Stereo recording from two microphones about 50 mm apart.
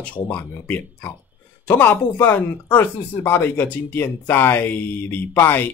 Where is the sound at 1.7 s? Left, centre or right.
Left.